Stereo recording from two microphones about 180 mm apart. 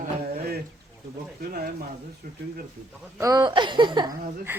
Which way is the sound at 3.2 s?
20° right (ahead or behind).